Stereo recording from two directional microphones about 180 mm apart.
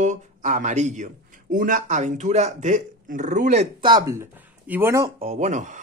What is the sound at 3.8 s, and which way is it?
Speech, 20° right (ahead or behind).